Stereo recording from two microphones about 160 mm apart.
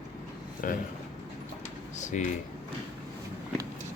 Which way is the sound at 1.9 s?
50° left (ahead or behind).